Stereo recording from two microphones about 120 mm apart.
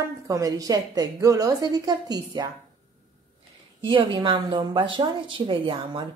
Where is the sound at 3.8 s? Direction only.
45° right (ahead or behind).